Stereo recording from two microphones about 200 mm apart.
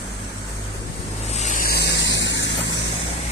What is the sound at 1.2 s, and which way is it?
Vehicle, 35° left (ahead or behind).